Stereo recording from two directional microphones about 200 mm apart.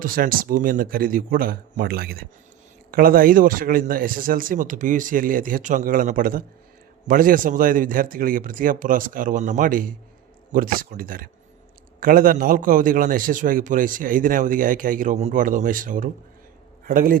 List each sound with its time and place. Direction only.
0.0 s a man's voice: 45° right (ahead or behind)